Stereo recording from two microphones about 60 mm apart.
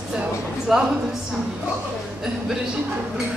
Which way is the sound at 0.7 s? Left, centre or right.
Centre.